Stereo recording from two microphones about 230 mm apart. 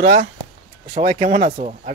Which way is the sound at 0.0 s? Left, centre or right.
Right.